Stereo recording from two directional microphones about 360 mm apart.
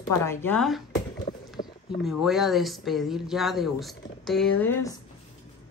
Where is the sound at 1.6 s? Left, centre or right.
Left.